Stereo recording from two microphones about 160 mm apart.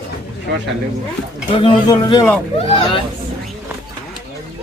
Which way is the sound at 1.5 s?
35° left (ahead or behind).